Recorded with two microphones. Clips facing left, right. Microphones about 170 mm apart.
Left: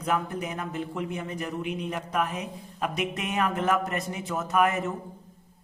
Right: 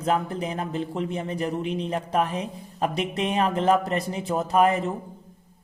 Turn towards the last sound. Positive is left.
turn(degrees=-30)  # may be behind; listen again after turning